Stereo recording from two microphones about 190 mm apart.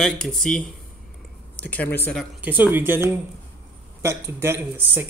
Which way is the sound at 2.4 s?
10° right (ahead or behind).